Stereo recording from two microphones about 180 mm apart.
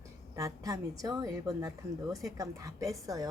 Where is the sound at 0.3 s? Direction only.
20° right (ahead or behind).